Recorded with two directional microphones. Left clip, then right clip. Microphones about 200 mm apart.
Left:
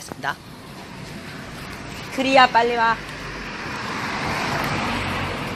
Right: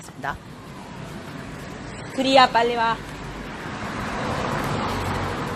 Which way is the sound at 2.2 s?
15° left (ahead or behind).